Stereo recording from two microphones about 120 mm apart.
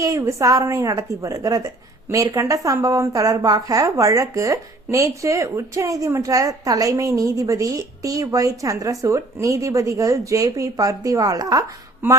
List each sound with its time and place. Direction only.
0.0 s a woman's voice: 25° right (ahead or behind)
12.0 s a woman's voice: 20° right (ahead or behind)